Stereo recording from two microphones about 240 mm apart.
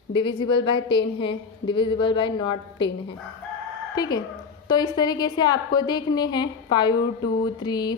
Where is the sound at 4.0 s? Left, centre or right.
Centre.